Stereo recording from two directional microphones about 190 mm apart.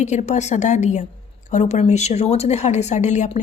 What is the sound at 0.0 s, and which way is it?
A woman's voice, 40° left (ahead or behind).